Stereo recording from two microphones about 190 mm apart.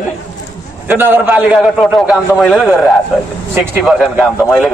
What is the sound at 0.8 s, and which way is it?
A man's voice, 10° right (ahead or behind).